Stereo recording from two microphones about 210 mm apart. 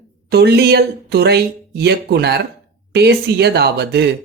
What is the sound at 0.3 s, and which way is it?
Speech, 50° right (ahead or behind).